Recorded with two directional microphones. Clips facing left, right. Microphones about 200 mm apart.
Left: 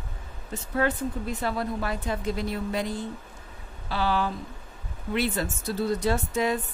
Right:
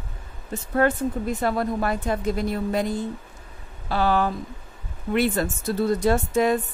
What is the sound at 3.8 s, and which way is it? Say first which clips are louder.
A woman's voice: right 5 dB; 50° right (ahead or behind).